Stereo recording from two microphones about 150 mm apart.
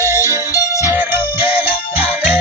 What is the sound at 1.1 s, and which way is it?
Music, 35° left (ahead or behind).